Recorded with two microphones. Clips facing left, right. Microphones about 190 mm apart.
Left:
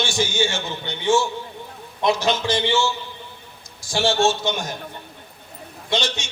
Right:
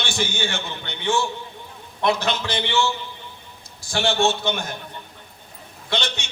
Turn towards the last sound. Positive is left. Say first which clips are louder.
# left 3 dB
turn(degrees=-60)  # may be behind; listen again after turning